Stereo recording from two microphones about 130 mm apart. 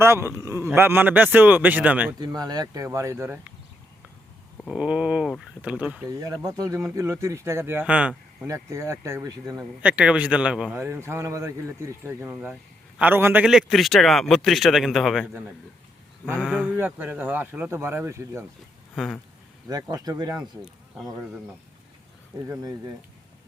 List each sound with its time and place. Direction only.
0.0 s a man's voice: 20° right (ahead or behind)
2.1 s speech: 30° right (ahead or behind); by 3.5 s 15° right (ahead or behind)
4.6 s a man's voice: 5° right (ahead or behind)
6.1 s speech: 25° right (ahead or behind); by 8.4 s 10° right (ahead or behind)
8.4 s speech: 25° right (ahead or behind)
9.8 s a man's voice: 10° right (ahead or behind)
10.8 s a man's voice: 20° right (ahead or behind); by 15.3 s centre (ahead or behind)
16.5 s a man's voice: 10° right (ahead or behind)
19.6 s speech: 30° right (ahead or behind)